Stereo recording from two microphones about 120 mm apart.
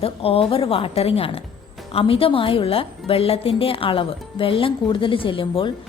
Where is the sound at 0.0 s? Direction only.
55° left (ahead or behind).